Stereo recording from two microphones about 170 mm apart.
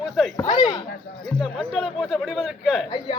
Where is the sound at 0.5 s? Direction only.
25° left (ahead or behind).